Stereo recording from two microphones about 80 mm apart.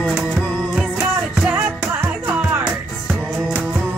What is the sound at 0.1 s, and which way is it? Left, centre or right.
Music, centre.